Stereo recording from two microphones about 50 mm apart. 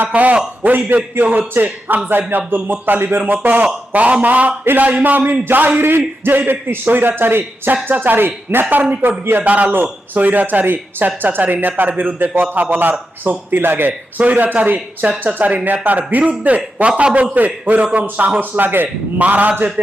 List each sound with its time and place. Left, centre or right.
0.1 s speech: right
9.5 s a man's voice: right
14.2 s a man's voice: right